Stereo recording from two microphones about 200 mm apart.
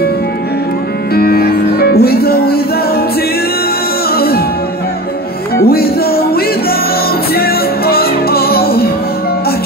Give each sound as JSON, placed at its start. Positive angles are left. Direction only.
{"t": 1.1, "sound": "music", "side_deg": 50}
{"t": 4.1, "sound": "music", "side_deg": 50}
{"t": 5.7, "sound": "music", "side_deg": 50}